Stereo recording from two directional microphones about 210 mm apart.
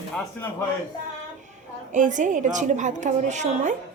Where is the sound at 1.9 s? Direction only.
35° right (ahead or behind).